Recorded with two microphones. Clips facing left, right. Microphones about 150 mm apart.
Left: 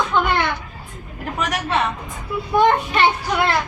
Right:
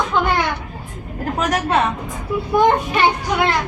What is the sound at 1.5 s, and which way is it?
Speech, 45° right (ahead or behind).